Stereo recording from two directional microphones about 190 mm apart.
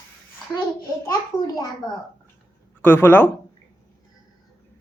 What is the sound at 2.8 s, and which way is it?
Speech, 10° left (ahead or behind).